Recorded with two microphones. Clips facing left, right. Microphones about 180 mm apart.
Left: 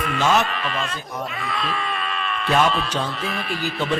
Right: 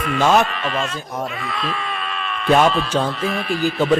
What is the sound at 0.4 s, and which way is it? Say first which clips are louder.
Speech: right 3 dB; centre (ahead or behind).